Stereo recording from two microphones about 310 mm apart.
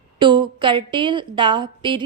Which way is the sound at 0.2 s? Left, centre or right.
Centre.